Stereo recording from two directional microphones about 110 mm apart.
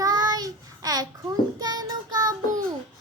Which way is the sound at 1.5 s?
35° right (ahead or behind).